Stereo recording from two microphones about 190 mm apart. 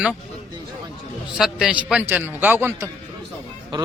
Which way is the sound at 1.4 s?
5° right (ahead or behind).